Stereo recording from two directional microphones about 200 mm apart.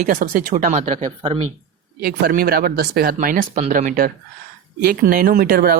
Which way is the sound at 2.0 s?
45° right (ahead or behind).